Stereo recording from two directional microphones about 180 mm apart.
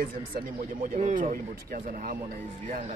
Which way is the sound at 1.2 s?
55° right (ahead or behind).